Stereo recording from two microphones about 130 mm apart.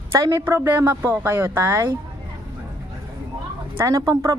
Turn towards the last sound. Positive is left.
turn(degrees=-25)  # may be behind; listen again after turning